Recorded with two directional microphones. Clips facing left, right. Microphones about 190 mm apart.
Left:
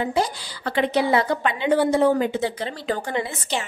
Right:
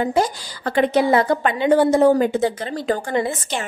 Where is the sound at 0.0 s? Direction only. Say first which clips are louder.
Right 4 dB; 45° right (ahead or behind).